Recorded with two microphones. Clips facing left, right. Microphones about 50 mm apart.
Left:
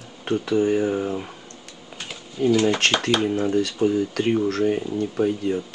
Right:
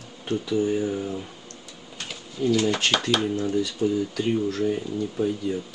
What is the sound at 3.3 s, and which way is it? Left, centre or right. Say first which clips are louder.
Speech: left 3 dB; left.